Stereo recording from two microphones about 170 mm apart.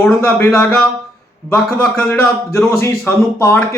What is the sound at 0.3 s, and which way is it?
Speech, 15° left (ahead or behind).